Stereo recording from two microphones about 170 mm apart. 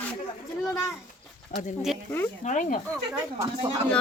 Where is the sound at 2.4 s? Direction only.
50° left (ahead or behind).